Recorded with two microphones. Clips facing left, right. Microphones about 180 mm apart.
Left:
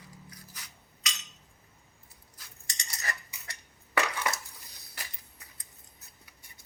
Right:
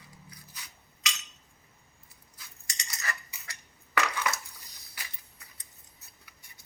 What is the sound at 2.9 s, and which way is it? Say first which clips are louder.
Cutlery: even; 30° left (ahead or behind).